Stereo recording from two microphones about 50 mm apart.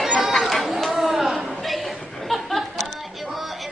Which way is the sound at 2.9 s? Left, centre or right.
Centre.